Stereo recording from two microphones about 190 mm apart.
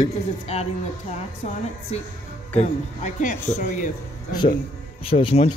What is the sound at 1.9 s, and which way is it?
Speech, 35° left (ahead or behind).